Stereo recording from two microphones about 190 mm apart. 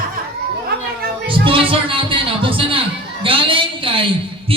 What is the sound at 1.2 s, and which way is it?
Music, 25° right (ahead or behind).